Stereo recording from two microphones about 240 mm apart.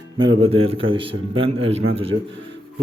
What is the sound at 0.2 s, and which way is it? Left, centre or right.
Speech, right.